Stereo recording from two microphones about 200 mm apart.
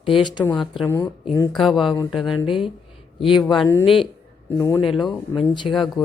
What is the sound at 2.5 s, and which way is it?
Speech, centre (ahead or behind).